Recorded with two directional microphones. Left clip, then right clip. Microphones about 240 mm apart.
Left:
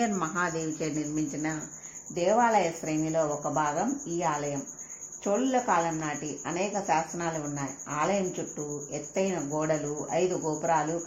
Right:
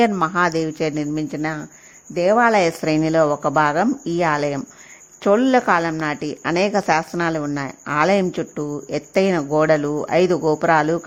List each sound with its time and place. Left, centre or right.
0.0 s a woman's voice: right